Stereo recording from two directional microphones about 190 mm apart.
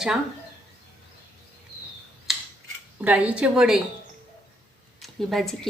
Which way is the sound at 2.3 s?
Centre (ahead or behind).